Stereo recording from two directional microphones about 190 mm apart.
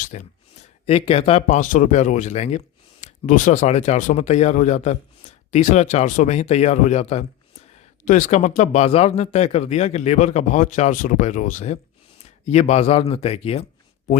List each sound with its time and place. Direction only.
0.0 s speech: 40° left (ahead or behind)